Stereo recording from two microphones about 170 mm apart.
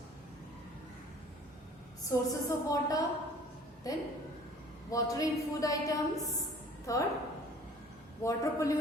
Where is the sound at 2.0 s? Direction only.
20° left (ahead or behind).